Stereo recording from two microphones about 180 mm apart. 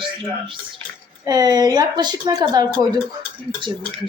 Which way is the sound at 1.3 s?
20° right (ahead or behind).